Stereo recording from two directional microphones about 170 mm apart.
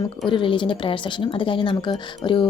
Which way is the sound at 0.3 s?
30° left (ahead or behind).